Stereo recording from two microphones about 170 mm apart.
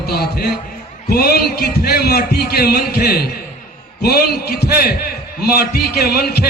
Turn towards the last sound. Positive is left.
turn(degrees=70)  # may be behind; listen again after turning